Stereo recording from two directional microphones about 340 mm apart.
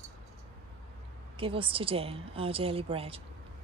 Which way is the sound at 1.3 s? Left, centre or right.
Centre.